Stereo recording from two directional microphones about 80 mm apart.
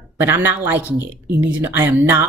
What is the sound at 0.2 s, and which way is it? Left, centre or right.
Speech, right.